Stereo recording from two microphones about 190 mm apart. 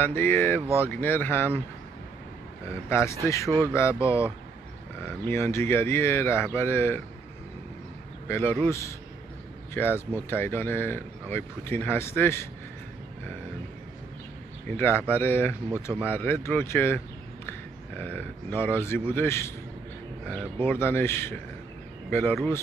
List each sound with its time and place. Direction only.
0.0 s speech: 10° left (ahead or behind)
2.7 s speech: 15° left (ahead or behind)
8.3 s speech: 10° left (ahead or behind)
14.7 s speech: 10° left (ahead or behind)
20.6 s speech: 10° left (ahead or behind)